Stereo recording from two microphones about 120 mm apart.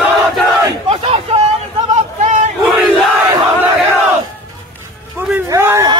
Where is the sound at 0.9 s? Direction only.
50° right (ahead or behind).